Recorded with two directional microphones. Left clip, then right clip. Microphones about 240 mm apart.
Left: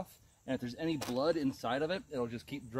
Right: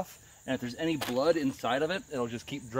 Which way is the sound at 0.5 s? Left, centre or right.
Centre.